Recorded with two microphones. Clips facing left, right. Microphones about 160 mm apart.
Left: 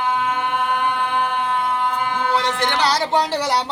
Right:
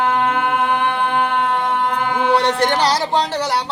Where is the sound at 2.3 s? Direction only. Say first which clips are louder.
Right 6 dB; 65° right (ahead or behind).